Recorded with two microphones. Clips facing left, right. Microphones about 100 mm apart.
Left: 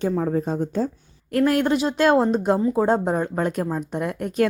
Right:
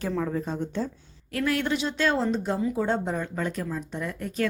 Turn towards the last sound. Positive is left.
turn(degrees=55)  # may be behind; listen again after turning